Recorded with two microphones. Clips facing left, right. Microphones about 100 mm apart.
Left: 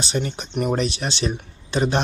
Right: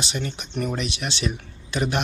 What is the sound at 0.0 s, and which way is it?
Speech, 35° left (ahead or behind).